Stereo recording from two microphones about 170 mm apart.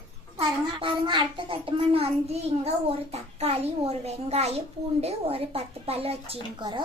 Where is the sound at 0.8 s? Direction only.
30° right (ahead or behind).